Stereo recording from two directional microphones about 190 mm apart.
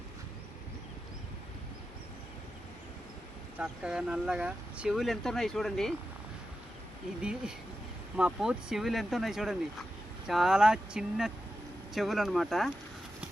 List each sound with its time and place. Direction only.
3.6 s speech: 5° right (ahead or behind)
7.2 s speech: 5° right (ahead or behind)